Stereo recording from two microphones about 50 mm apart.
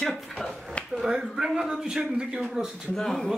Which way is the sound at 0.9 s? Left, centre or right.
Centre.